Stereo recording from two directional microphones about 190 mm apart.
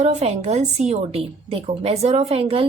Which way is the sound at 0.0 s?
35° right (ahead or behind).